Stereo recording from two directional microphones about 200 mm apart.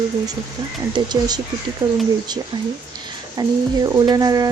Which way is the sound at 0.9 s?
20° right (ahead or behind).